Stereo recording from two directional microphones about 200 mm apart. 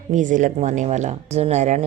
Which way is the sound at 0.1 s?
40° right (ahead or behind).